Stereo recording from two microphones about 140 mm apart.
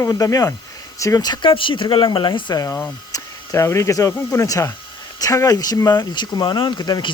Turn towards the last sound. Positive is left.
turn(degrees=30)  # may be behind; listen again after turning